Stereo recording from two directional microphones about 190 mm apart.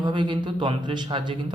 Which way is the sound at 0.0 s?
25° right (ahead or behind).